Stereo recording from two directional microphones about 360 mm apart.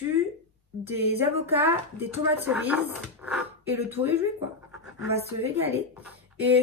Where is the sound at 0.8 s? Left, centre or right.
Centre.